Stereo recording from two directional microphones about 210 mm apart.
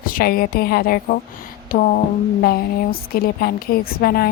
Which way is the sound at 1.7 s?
40° left (ahead or behind).